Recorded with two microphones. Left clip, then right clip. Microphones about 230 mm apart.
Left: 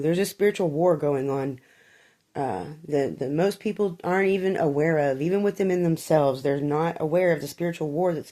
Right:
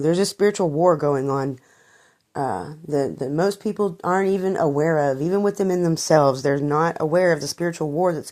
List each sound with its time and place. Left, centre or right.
0.0 s speech: right